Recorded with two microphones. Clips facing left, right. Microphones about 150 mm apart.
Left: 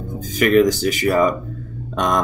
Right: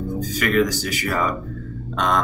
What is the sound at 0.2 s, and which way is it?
Speech, 20° left (ahead or behind).